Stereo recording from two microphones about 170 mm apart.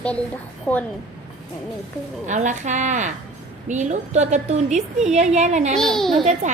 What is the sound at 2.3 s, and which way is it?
A woman's voice, 45° right (ahead or behind).